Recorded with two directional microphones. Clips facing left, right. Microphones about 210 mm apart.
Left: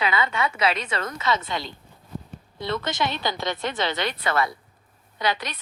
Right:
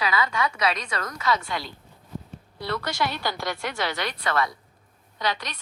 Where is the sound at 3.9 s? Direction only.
Centre (ahead or behind).